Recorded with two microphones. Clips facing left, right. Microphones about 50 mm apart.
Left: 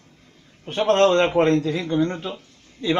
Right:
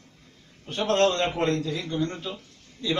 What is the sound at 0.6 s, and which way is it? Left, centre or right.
A man's voice, left.